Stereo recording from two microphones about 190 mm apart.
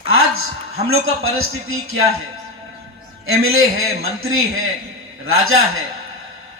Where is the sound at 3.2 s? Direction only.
90° right.